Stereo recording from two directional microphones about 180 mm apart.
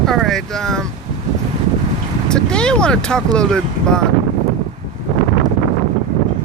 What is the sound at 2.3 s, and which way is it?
Speech, 5° left (ahead or behind).